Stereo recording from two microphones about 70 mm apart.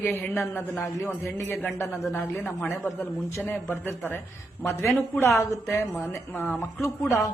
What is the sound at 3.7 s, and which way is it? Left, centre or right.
Speech, left.